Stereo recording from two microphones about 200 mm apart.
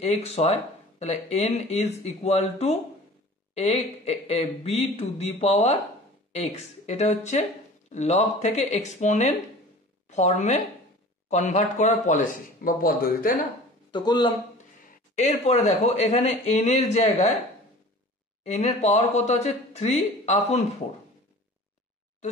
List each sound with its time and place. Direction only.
0.0 s a woman's voice: 30° left (ahead or behind)
13.9 s speech: 20° left (ahead or behind)
15.1 s speech: 35° left (ahead or behind)
18.4 s speech: 35° left (ahead or behind)